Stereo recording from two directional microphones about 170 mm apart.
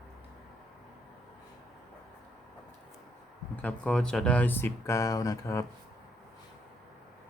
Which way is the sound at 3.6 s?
10° left (ahead or behind).